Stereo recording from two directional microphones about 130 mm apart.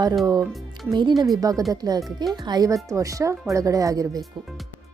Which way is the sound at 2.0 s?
Centre (ahead or behind).